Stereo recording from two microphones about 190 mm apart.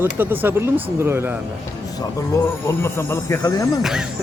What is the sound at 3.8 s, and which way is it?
Speech, 5° right (ahead or behind).